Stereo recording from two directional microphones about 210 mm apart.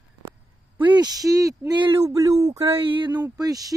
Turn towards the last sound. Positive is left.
turn(degrees=-15)  # may be behind; listen again after turning